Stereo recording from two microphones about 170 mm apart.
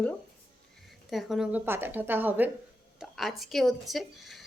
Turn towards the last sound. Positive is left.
turn(degrees=0)  # may be behind; listen again after turning